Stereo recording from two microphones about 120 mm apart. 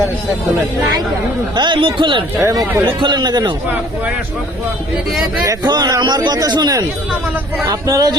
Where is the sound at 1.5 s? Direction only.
40° right (ahead or behind).